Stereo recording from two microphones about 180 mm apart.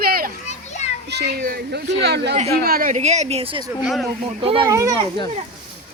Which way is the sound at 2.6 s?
55° right (ahead or behind).